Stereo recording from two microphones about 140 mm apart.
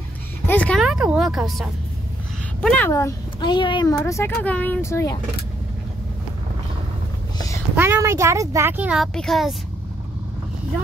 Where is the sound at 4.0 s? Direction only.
15° left (ahead or behind).